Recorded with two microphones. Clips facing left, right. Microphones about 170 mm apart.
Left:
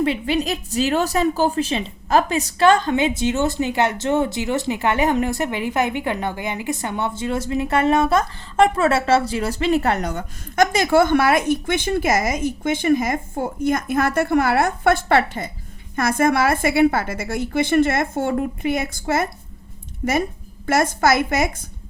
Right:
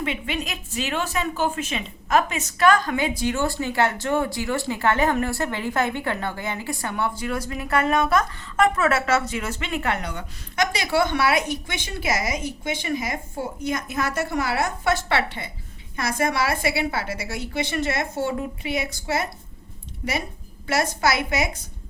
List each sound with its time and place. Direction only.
0.0 s a woman's voice: 35° left (ahead or behind)
20.7 s a woman's voice: 50° left (ahead or behind)